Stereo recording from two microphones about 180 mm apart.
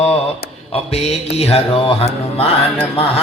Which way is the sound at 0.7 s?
35° left (ahead or behind).